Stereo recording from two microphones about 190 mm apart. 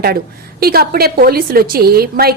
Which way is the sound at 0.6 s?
55° right (ahead or behind).